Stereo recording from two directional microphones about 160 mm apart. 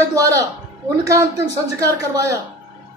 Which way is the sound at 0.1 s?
20° right (ahead or behind).